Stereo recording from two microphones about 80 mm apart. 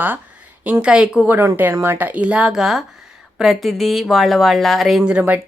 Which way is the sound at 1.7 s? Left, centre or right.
Right.